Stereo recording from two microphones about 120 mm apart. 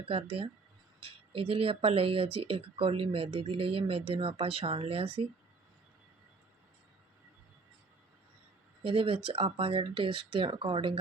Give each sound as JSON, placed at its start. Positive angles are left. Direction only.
{"t": 0.0, "sound": "speech", "side_deg": -50}
{"t": 8.8, "sound": "speech", "side_deg": -50}